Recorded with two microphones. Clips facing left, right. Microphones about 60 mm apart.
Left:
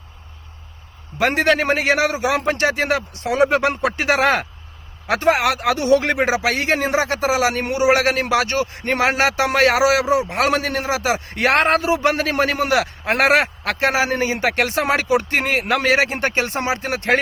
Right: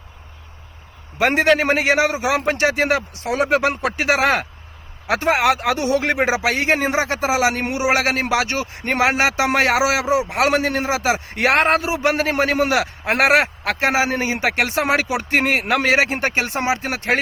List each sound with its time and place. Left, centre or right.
1.2 s a man's voice: right
3.2 s speech: centre
5.2 s speech: right; by 10.5 s centre
10.5 s speech: right
11.4 s speech: centre
11.9 s a man's voice: centre